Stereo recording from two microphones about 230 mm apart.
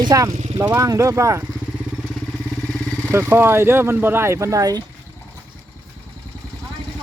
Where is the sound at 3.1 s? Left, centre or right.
Centre.